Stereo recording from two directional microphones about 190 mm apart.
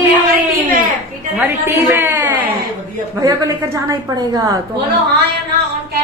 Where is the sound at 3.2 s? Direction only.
20° right (ahead or behind).